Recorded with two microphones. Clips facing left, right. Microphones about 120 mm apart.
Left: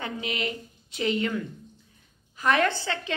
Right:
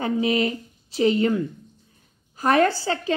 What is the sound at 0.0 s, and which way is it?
A woman's voice, 35° right (ahead or behind).